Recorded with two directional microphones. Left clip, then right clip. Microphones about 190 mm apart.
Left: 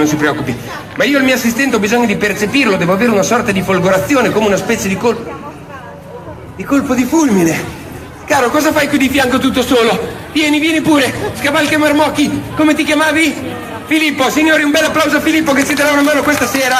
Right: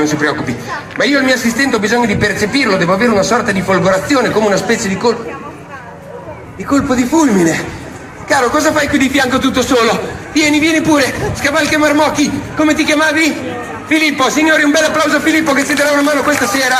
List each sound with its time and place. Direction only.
0.0 s a man's voice: 20° left (ahead or behind)
6.7 s a man's voice: 20° left (ahead or behind)
9.3 s a man's voice: 60° left (ahead or behind)
14.8 s a man's voice: 25° left (ahead or behind)